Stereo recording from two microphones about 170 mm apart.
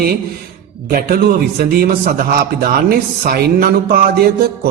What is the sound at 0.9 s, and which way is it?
A man's voice, 60° right (ahead or behind).